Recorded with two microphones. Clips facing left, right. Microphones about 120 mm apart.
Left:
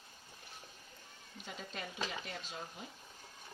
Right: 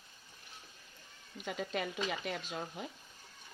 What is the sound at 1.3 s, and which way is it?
Speech, 70° right (ahead or behind).